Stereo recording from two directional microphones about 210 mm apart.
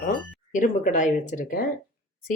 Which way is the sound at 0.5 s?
40° left (ahead or behind).